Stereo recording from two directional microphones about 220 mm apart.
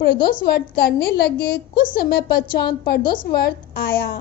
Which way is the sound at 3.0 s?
20° left (ahead or behind).